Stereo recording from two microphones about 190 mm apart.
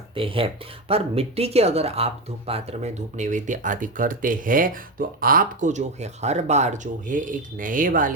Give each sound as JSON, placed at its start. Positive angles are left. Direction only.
{"t": 0.1, "sound": "speech", "side_deg": -30}